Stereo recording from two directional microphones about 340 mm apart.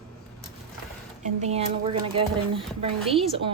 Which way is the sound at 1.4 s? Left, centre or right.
Centre.